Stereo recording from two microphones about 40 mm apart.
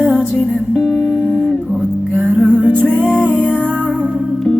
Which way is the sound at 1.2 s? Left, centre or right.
Left.